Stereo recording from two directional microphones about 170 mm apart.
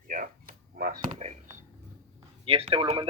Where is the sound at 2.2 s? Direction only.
35° right (ahead or behind).